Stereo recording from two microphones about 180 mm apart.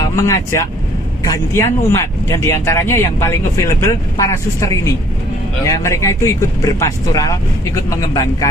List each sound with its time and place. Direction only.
0.0 s speech: 15° left (ahead or behind)